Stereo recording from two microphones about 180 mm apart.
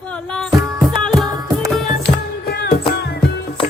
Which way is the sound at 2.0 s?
65° left (ahead or behind).